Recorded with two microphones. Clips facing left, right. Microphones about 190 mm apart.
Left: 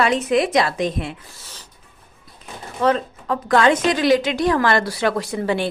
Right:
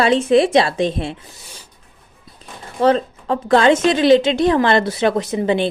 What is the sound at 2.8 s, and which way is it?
A woman's voice, 30° right (ahead or behind).